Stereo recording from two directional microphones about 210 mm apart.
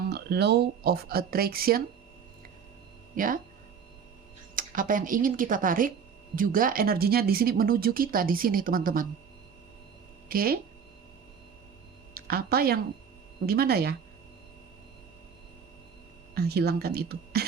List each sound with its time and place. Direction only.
0.1 s speech: 50° right (ahead or behind)
3.2 s speech: 40° right (ahead or behind)
4.5 s speech: 40° right (ahead or behind)
10.2 s speech: 45° right (ahead or behind)
12.1 s speech: 45° right (ahead or behind)
16.3 s speech: 50° right (ahead or behind)